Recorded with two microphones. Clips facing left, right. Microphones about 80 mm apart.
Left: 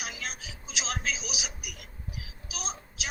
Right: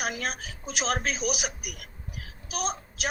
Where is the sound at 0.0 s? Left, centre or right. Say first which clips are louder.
Right 7 dB; right.